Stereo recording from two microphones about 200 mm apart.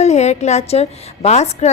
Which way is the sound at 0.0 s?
35° left (ahead or behind).